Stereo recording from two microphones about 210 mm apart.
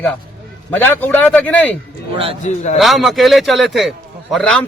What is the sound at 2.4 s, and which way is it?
Speech, 35° left (ahead or behind).